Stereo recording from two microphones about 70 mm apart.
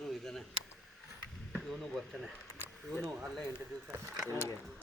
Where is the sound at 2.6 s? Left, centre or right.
Right.